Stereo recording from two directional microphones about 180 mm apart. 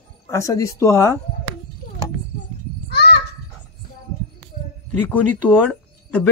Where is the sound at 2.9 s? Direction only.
65° left (ahead or behind).